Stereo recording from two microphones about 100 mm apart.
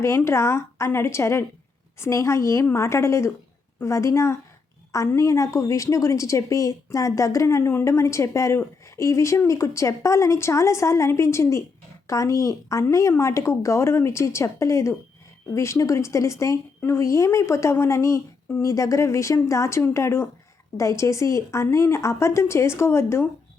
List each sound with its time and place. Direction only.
0.3 s a woman's voice: 25° left (ahead or behind)